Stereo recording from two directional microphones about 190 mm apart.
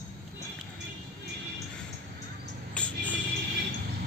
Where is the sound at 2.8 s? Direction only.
5° left (ahead or behind).